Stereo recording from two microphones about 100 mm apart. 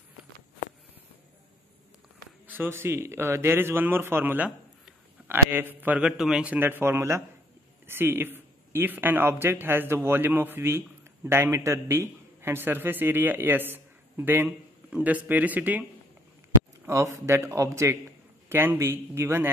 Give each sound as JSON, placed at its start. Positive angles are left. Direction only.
{"t": 2.4, "sound": "a man's voice", "side_deg": -20}
{"t": 16.8, "sound": "a man's voice", "side_deg": -30}